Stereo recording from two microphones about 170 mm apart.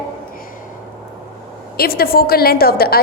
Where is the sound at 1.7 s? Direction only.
60° left (ahead or behind).